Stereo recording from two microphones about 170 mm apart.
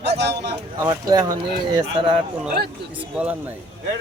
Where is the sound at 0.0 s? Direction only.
80° right.